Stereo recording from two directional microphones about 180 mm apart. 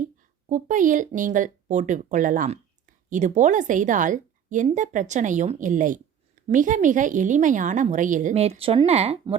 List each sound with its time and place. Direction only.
0.4 s a woman's voice: 45° right (ahead or behind)